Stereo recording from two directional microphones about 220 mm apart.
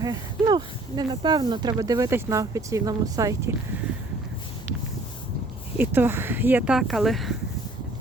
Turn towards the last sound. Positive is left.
turn(degrees=0)  # may be behind; listen again after turning